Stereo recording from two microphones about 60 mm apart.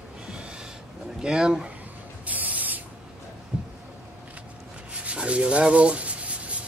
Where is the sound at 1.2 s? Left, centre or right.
Centre.